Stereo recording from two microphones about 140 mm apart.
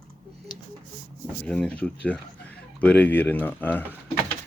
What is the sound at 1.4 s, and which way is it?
Speech, 5° left (ahead or behind).